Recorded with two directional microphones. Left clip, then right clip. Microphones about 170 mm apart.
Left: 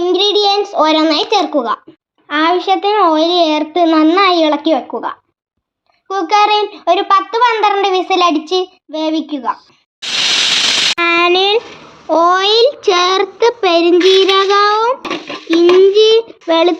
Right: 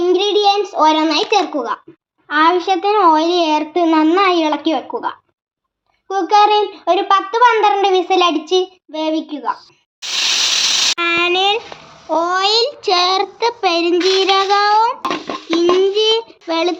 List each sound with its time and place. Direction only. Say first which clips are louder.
0.0 s child singing: left 1 dB; 40° left (ahead or behind)
2.2 s a child's voice: even; 30° left (ahead or behind)
6.1 s speech: left 1 dB; 40° left (ahead or behind)
10.9 s a sound: left 4 dB; 20° left (ahead or behind)
12.0 s child singing: left 5 dB; 20° left (ahead or behind)